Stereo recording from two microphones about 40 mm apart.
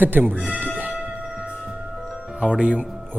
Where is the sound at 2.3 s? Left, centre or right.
Right.